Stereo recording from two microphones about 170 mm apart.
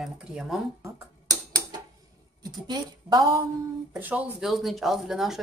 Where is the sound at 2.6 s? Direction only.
25° right (ahead or behind).